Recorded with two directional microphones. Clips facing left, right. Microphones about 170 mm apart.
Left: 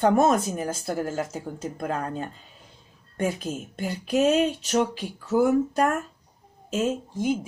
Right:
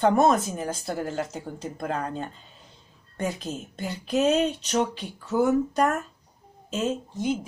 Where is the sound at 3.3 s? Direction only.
10° left (ahead or behind).